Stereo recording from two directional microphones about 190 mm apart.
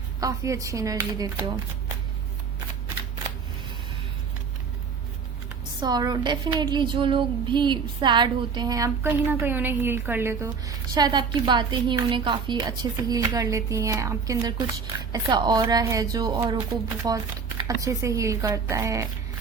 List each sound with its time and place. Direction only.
0.2 s speech: 15° right (ahead or behind)
5.8 s a woman's voice: 20° right (ahead or behind)